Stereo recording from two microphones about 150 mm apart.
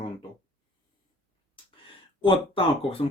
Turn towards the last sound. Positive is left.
turn(degrees=35)  # may be behind; listen again after turning